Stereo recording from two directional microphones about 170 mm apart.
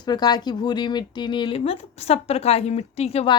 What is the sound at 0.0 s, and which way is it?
Speech, 25° left (ahead or behind).